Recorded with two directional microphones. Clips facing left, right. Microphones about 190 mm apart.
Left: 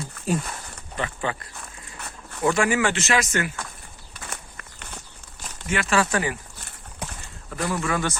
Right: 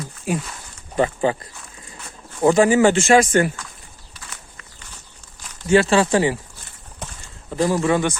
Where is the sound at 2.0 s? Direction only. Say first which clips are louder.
Left 2 dB; 60° left (ahead or behind).